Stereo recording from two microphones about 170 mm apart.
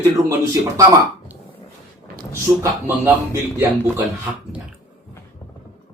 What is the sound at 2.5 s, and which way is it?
Speech, 10° right (ahead or behind).